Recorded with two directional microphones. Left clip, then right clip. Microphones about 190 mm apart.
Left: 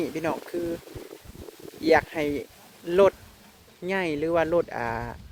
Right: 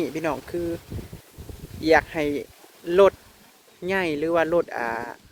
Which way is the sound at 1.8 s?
10° right (ahead or behind).